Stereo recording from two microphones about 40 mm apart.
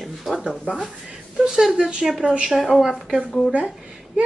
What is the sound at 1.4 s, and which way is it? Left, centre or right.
Speech, centre.